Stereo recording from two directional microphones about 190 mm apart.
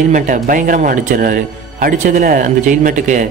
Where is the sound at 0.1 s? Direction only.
45° right (ahead or behind).